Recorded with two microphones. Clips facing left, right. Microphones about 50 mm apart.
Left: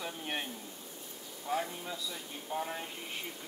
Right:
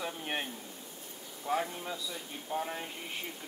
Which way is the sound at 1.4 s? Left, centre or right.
Centre.